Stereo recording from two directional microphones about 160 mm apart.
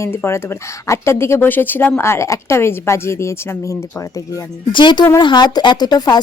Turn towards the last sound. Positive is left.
turn(degrees=25)  # may be behind; listen again after turning